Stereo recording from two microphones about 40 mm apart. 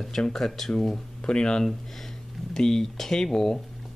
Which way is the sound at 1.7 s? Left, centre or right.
Centre.